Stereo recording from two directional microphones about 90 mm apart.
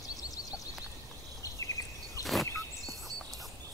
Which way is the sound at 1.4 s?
35° left (ahead or behind).